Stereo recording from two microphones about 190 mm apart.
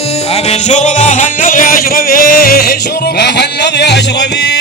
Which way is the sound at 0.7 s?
40° left (ahead or behind).